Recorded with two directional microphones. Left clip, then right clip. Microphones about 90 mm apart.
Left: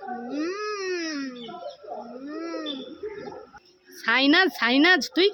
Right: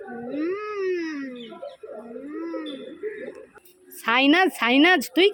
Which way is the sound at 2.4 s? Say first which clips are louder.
Even; 35° left (ahead or behind).